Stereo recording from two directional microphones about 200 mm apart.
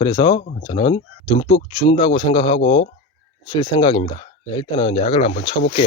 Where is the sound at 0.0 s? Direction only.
25° left (ahead or behind).